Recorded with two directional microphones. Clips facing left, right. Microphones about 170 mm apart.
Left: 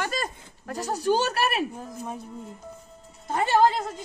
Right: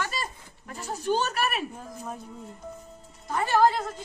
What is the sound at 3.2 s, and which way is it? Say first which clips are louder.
Speech: left 2 dB; 25° left (ahead or behind).